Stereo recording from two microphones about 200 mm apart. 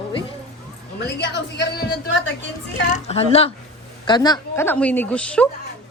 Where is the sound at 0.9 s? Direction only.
60° left (ahead or behind).